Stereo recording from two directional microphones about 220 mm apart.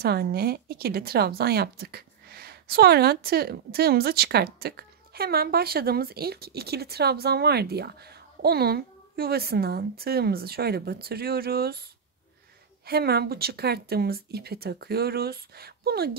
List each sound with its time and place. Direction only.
0.0 s a woman's voice: 45° right (ahead or behind)